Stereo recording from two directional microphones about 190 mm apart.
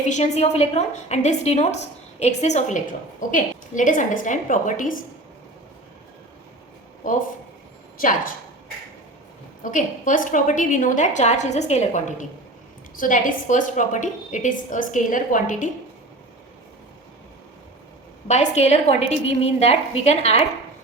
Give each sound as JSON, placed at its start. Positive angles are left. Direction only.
{"t": 0.1, "sound": "a woman's voice", "side_deg": 35}
{"t": 7.9, "sound": "a woman's voice", "side_deg": 45}
{"t": 9.7, "sound": "a woman's voice", "side_deg": 40}
{"t": 18.3, "sound": "a woman's voice", "side_deg": 35}